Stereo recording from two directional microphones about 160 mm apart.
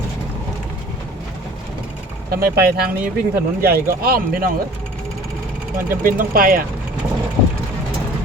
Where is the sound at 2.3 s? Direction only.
70° right (ahead or behind).